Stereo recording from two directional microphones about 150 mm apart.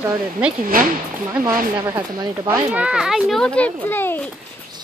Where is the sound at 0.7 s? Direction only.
75° right (ahead or behind).